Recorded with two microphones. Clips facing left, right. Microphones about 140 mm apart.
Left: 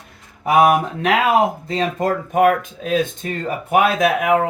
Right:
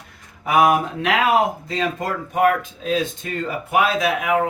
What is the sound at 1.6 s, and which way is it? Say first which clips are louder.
Speech: left 4 dB; 45° left (ahead or behind).